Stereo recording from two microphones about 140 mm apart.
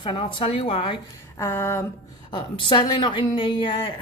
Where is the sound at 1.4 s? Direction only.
15° left (ahead or behind).